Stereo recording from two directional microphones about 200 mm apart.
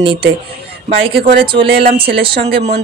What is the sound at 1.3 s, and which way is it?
A woman's voice, 25° right (ahead or behind).